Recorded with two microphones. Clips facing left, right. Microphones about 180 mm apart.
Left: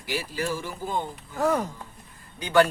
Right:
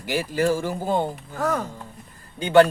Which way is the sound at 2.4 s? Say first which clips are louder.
Right 5 dB; 25° right (ahead or behind).